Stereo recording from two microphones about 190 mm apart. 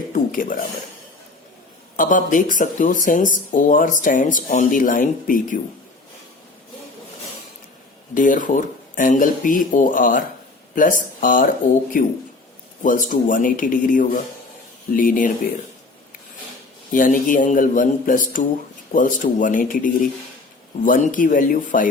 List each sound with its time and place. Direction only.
0.1 s a sound: 45° left (ahead or behind)
2.0 s speech: 45° left (ahead or behind)
8.1 s speech: 45° left (ahead or behind)
16.9 s speech: 45° left (ahead or behind)